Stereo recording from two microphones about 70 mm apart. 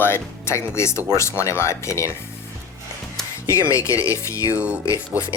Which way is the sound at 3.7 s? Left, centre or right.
Left.